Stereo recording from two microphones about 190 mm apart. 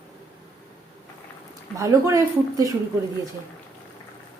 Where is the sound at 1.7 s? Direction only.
15° right (ahead or behind).